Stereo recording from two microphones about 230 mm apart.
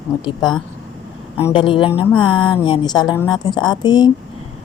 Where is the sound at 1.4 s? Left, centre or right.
Left.